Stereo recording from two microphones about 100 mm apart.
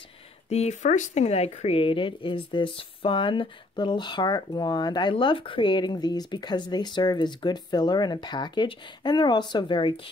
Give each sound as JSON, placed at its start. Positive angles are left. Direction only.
{"t": 0.5, "sound": "speech", "side_deg": 90}
{"t": 5.1, "sound": "speech", "side_deg": 60}